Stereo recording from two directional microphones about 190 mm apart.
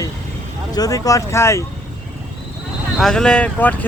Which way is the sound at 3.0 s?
5° left (ahead or behind).